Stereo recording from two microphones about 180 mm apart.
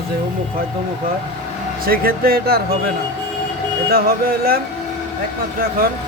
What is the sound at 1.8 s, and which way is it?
Speech, 55° right (ahead or behind).